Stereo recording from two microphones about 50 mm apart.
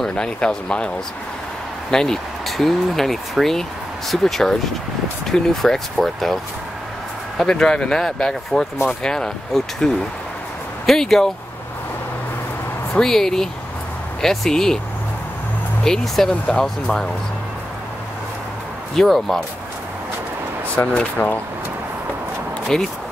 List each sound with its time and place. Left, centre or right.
0.0 s speech: centre
1.9 s speech: centre
7.4 s speech: centre
10.9 s speech: centre
13.0 s speech: centre
15.8 s speech: centre
16.3 s speech: centre
18.9 s speech: centre
20.7 s speech: left
22.7 s speech: centre